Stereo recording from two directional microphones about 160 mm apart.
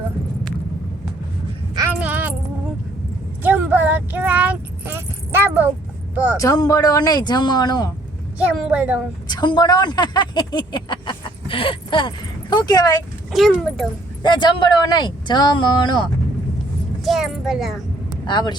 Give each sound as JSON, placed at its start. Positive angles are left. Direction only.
{"t": 2.0, "sound": "a sound", "side_deg": -10}
{"t": 3.4, "sound": "a sound", "side_deg": -10}
{"t": 6.4, "sound": "speech", "side_deg": 20}
{"t": 8.4, "sound": "a woman's voice", "side_deg": -5}
{"t": 9.2, "sound": "speech", "side_deg": 25}
{"t": 13.3, "sound": "a child's voice", "side_deg": 0}
{"t": 14.2, "sound": "speech", "side_deg": 30}
{"t": 17.0, "sound": "a child's voice", "side_deg": 0}
{"t": 18.3, "sound": "speech", "side_deg": 30}